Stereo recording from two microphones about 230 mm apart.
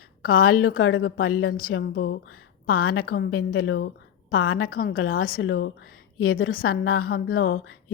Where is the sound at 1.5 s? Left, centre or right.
Left.